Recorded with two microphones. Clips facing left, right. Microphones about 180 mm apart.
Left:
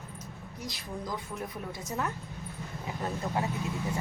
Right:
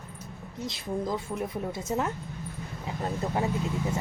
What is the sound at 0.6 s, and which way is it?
A woman's voice, 25° right (ahead or behind).